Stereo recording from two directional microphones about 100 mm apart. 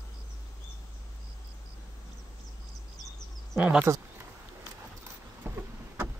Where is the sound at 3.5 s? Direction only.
15° right (ahead or behind).